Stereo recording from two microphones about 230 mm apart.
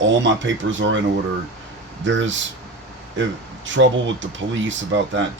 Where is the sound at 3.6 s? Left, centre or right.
Right.